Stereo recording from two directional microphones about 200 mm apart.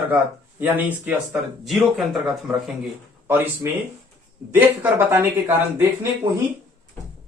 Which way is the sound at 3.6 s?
15° right (ahead or behind).